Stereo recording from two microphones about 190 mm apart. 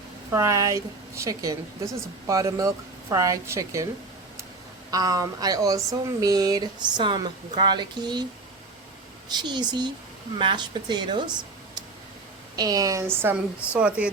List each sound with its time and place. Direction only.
0.3 s a woman's voice: 15° right (ahead or behind)
4.9 s speech: 20° right (ahead or behind)
9.3 s speech: 20° right (ahead or behind)
12.5 s a woman's voice: 20° right (ahead or behind)